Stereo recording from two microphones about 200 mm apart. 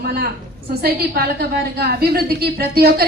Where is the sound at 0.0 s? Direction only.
50° right (ahead or behind).